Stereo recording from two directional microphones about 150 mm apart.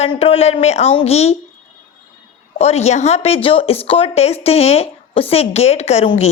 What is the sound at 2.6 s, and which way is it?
Speech, 45° left (ahead or behind).